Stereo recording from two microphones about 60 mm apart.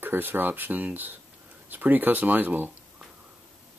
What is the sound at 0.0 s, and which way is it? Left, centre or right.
Speech, right.